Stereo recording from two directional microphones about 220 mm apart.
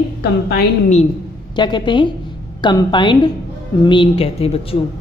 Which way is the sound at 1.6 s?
20° left (ahead or behind).